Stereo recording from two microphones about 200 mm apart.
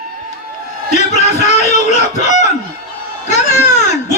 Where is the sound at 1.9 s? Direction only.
35° left (ahead or behind).